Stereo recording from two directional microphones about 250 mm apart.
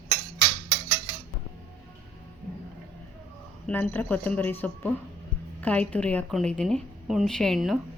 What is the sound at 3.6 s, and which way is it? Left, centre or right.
A woman's voice, centre.